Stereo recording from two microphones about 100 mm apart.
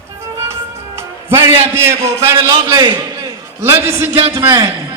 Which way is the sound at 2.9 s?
25° right (ahead or behind).